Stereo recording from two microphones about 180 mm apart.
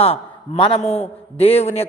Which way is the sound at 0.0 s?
35° left (ahead or behind).